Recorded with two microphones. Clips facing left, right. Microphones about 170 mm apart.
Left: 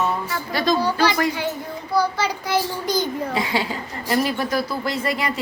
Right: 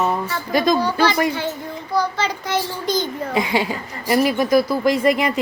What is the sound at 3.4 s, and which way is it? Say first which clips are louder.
Speech: right 7 dB; 15° right (ahead or behind).